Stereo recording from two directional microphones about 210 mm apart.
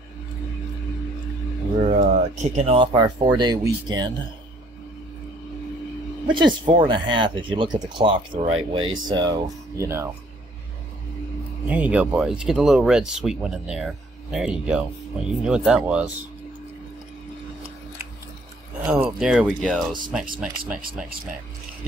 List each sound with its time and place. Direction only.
1.9 s speech: 35° right (ahead or behind)
2.9 s speech: 15° right (ahead or behind)
6.2 s speech: 20° right (ahead or behind)
11.6 s speech: 5° right (ahead or behind)
18.9 s speech: 5° right (ahead or behind)